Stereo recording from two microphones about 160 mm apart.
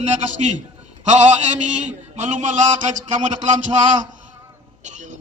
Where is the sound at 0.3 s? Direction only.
50° right (ahead or behind).